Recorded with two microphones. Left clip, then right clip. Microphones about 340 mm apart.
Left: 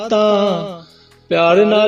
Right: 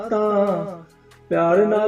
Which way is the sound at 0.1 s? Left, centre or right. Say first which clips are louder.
Left 7 dB; left.